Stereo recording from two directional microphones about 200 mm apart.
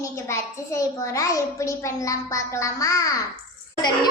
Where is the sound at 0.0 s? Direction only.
15° left (ahead or behind).